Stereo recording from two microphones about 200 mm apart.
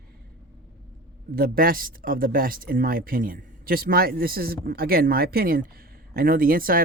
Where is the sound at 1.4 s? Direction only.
45° right (ahead or behind).